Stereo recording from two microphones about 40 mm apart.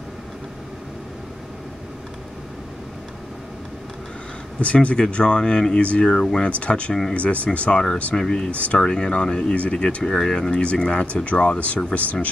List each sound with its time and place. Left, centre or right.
4.6 s speech: left
6.1 s speech: centre
6.6 s speech: left
8.2 s speech: centre
10.0 s speech: centre
10.6 s speech: left